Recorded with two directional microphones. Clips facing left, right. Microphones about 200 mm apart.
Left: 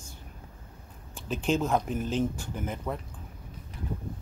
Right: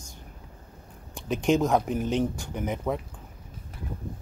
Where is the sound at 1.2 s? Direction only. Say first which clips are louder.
Right 4 dB; 15° right (ahead or behind).